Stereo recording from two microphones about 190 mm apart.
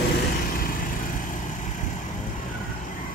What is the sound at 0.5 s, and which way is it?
Vehicle, 45° left (ahead or behind).